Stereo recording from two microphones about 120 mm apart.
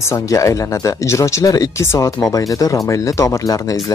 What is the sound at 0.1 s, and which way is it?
Speech, 25° left (ahead or behind).